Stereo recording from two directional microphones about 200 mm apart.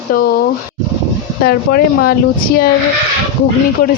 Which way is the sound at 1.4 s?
50° left (ahead or behind).